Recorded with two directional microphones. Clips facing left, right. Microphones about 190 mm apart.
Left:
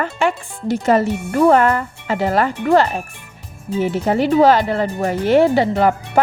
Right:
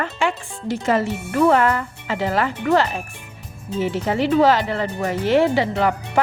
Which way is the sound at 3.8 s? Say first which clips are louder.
Left 3 dB; 45° left (ahead or behind).